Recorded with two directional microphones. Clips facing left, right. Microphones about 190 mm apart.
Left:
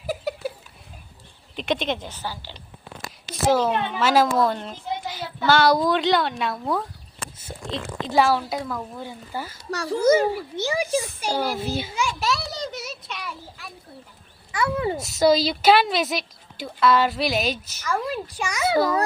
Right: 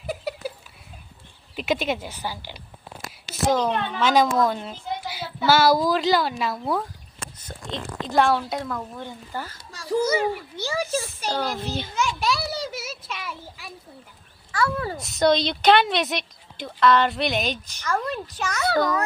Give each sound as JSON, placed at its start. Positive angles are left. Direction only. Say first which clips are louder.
{"t": 0.0, "sound": "a sound", "louder": "left 2 dB", "side_deg": 0}
{"t": 1.5, "sound": "speech", "louder": "even", "side_deg": -5}
{"t": 3.5, "sound": "a woman's voice", "louder": "left 2 dB", "side_deg": 5}
{"t": 9.7, "sound": "a child's voice", "louder": "right 1 dB", "side_deg": 70}
{"t": 10.6, "sound": "a child's voice", "louder": "left 3 dB", "side_deg": 15}
{"t": 14.5, "sound": "a child's voice", "louder": "left 2 dB", "side_deg": 20}
{"t": 14.9, "sound": "a woman's voice", "louder": "left 1 dB", "side_deg": 0}